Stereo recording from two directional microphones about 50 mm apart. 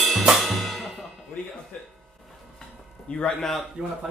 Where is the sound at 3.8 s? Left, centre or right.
Centre.